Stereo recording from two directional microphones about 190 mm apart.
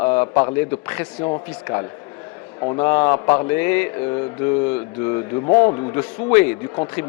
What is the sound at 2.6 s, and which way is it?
Speech, 25° left (ahead or behind).